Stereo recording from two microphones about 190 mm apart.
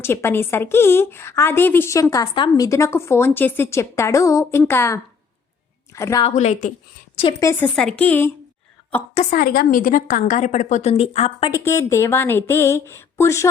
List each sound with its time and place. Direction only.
0.0 s a woman's voice: 15° left (ahead or behind)
6.2 s a woman's voice: 35° left (ahead or behind)
7.2 s a woman's voice: 20° left (ahead or behind)
7.8 s a woman's voice: 5° left (ahead or behind)
9.1 s a woman's voice: 50° left (ahead or behind); by 11.6 s 25° left (ahead or behind)
11.6 s a woman's voice: 15° left (ahead or behind)